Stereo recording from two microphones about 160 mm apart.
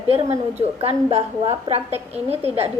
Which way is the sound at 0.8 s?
40° right (ahead or behind).